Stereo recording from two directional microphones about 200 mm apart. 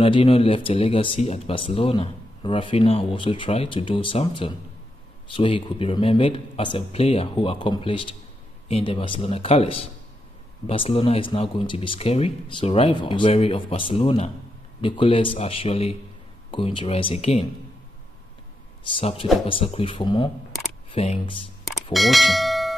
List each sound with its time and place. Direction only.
0.0 s speech: 25° left (ahead or behind)
18.9 s speech: 25° left (ahead or behind)
21.9 s speech: centre (ahead or behind)